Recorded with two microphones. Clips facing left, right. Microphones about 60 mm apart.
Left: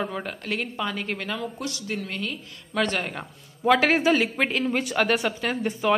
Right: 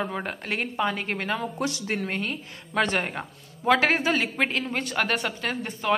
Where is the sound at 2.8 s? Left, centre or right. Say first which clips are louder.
Right 1 dB; centre.